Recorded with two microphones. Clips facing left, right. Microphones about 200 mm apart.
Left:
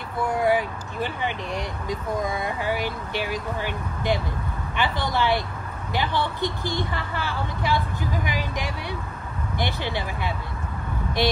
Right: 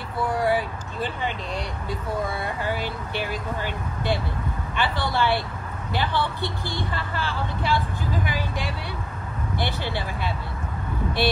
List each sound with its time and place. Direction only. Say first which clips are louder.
0.4 s speech: left 3 dB; 15° left (ahead or behind)